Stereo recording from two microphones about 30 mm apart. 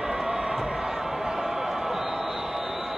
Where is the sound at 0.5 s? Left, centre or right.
Centre.